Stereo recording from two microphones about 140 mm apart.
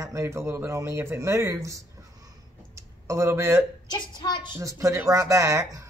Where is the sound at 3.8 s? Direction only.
30° left (ahead or behind).